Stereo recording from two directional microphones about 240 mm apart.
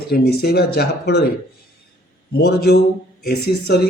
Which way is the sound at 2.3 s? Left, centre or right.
Left.